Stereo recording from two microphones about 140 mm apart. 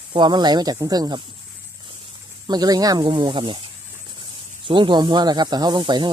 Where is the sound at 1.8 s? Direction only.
35° right (ahead or behind).